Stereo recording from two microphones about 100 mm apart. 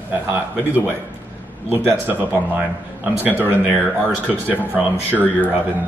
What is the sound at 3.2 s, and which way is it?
Speech, 20° right (ahead or behind).